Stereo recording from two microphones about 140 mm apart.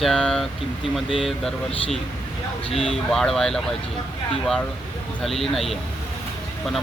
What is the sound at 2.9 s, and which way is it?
Speech, centre (ahead or behind).